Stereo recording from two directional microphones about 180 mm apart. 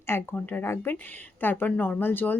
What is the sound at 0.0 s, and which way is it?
Speech, 10° left (ahead or behind).